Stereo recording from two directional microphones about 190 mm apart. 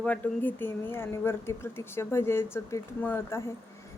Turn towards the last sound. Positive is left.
turn(degrees=15)  # may be behind; listen again after turning